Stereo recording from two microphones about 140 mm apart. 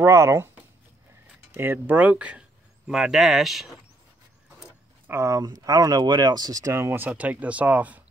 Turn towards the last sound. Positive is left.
turn(degrees=-10)  # may be behind; listen again after turning